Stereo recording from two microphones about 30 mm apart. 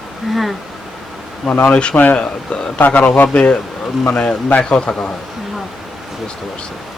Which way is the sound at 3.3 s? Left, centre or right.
Left.